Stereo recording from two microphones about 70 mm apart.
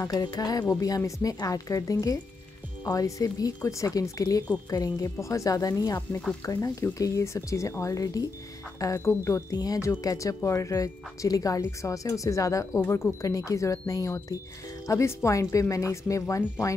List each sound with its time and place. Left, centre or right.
0.0 s speech: left
9.5 s speech: left
9.8 s speech: left
12.8 s speech: left
13.2 s speech: left